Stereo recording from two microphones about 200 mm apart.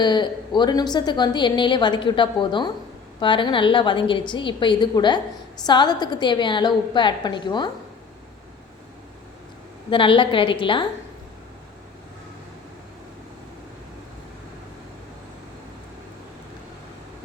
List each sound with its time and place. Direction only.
0.0 s a woman's voice: 20° left (ahead or behind)
9.9 s a woman's voice: 25° left (ahead or behind)